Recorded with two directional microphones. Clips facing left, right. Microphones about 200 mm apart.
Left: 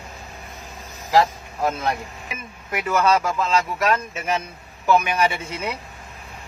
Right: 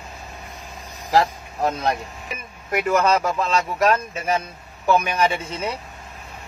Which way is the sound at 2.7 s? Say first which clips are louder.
Right 1 dB; 45° right (ahead or behind).